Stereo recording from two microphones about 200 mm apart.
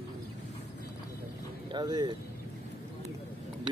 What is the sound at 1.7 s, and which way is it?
Speech, 20° right (ahead or behind).